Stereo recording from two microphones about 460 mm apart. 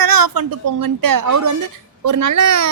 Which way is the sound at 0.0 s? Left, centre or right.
Right.